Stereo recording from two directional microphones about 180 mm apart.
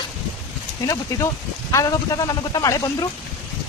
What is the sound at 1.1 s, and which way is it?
A man's voice, 15° left (ahead or behind).